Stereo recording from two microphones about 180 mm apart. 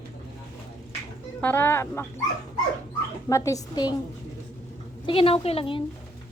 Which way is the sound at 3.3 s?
20° left (ahead or behind).